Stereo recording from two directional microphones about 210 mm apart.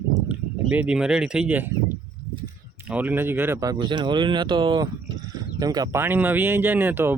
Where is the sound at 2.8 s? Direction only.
10° right (ahead or behind).